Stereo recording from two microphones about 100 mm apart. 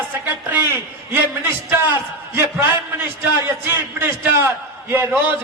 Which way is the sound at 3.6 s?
20° right (ahead or behind).